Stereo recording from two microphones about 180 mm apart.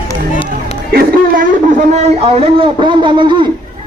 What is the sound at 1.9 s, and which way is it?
Speech, 35° right (ahead or behind).